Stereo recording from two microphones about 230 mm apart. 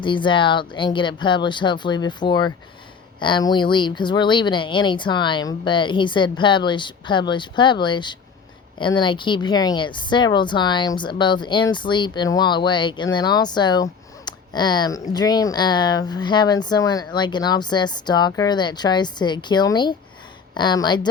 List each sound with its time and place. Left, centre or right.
0.0 s a woman's voice: left